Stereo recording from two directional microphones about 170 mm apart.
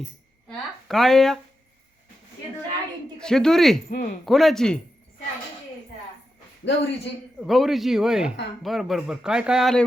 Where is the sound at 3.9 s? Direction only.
55° left (ahead or behind).